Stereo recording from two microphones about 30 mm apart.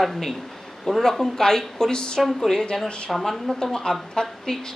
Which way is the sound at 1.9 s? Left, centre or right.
Left.